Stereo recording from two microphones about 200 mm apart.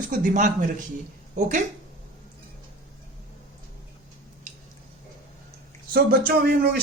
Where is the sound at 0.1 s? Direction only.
40° right (ahead or behind).